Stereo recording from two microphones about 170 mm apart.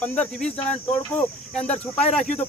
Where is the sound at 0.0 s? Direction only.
10° left (ahead or behind).